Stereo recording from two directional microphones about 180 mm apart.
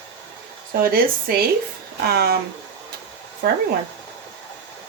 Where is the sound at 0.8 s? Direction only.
55° right (ahead or behind).